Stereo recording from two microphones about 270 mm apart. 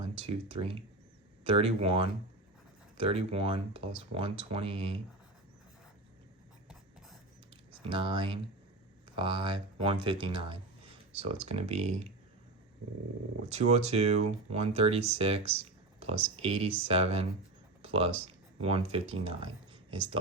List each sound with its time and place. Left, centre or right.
0.0 s speech: right
3.1 s speech: right
7.9 s speech: centre
13.5 s speech: right